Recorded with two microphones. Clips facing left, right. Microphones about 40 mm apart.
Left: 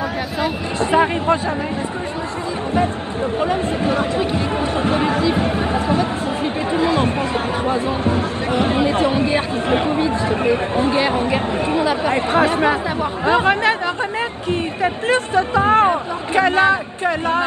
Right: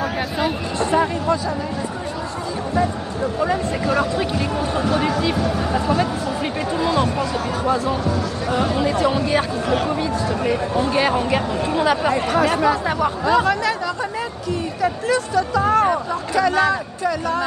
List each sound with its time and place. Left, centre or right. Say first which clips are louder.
0.9 s speech: left 3 dB; left
3.3 s speech: left 2 dB; left
11.8 s speech: right 4 dB; centre
12.1 s speech: left 2 dB; left